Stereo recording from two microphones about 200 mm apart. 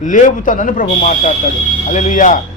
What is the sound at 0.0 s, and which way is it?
A man's voice, 40° left (ahead or behind).